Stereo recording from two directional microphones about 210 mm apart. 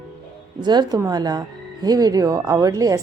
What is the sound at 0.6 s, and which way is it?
Speech, 20° right (ahead or behind).